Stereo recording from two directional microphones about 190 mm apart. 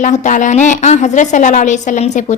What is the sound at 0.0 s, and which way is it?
A woman's voice, 40° left (ahead or behind).